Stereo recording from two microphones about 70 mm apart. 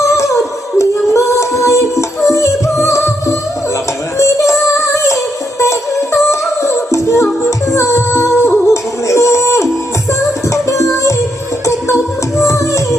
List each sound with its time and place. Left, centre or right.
0.2 s music: left
4.2 s music: left